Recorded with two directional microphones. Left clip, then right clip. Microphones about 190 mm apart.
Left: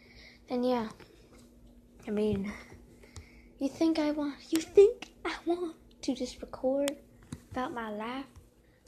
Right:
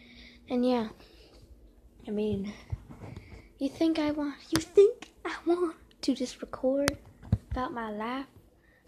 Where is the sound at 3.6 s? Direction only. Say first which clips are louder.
Right 1 dB; 10° right (ahead or behind).